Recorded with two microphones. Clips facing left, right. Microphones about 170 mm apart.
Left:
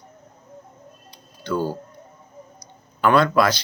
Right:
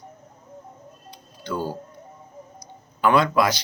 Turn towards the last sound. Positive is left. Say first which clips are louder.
# left 2 dB
turn(degrees=-15)  # may be behind; listen again after turning